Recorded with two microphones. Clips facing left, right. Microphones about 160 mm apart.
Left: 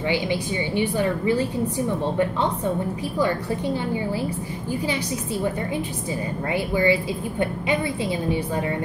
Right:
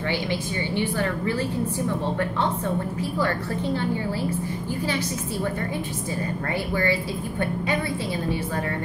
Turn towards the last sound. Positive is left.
turn(degrees=15)  # may be behind; listen again after turning